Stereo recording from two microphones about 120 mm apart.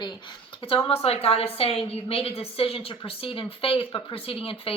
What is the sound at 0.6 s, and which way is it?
A woman's voice, 50° left (ahead or behind).